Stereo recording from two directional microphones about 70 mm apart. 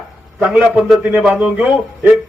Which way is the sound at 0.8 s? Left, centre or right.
Centre.